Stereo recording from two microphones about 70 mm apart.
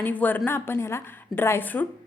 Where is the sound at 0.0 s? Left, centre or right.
Left.